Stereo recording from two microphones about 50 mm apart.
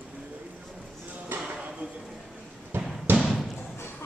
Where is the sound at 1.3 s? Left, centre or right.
Right.